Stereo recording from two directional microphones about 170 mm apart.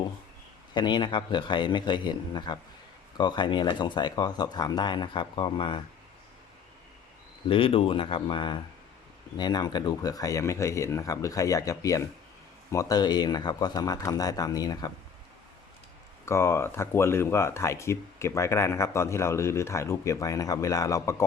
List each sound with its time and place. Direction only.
0.7 s speech: 25° left (ahead or behind)
7.4 s speech: 30° left (ahead or behind)
16.2 s speech: 15° left (ahead or behind)